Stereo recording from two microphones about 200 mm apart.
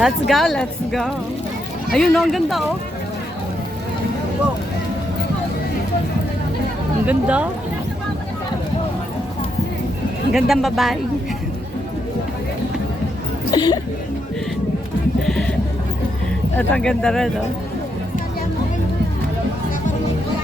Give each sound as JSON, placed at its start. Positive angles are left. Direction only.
{"t": 0.0, "sound": "speech", "side_deg": 0}
{"t": 7.0, "sound": "speech", "side_deg": -5}
{"t": 10.3, "sound": "speech", "side_deg": 0}
{"t": 13.5, "sound": "a sound", "side_deg": 20}
{"t": 15.3, "sound": "music", "side_deg": 5}
{"t": 16.6, "sound": "speech", "side_deg": 5}